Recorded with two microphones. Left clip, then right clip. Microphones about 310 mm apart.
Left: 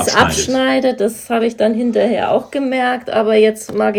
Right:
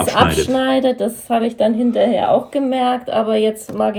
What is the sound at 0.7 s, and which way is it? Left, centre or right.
Speech, left.